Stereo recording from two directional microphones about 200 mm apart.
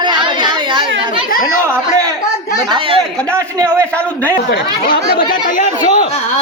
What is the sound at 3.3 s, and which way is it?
Speech, 15° right (ahead or behind).